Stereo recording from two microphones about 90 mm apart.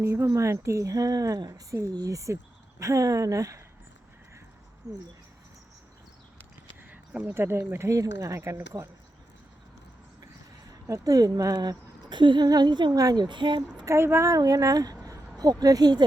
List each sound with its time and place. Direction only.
0.0 s a woman's voice: 30° right (ahead or behind)
6.8 s a sound: 20° right (ahead or behind)
7.3 s a woman's voice: 25° right (ahead or behind)
10.7 s speech: 40° right (ahead or behind)
13.2 s speech: 60° right (ahead or behind)
13.8 s a woman's voice: 30° right (ahead or behind); by 16.0 s 50° right (ahead or behind)